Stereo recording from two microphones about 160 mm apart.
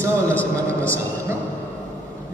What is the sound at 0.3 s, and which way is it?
Speech, 10° left (ahead or behind).